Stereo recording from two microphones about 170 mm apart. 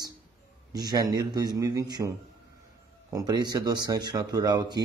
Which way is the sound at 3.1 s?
25° right (ahead or behind).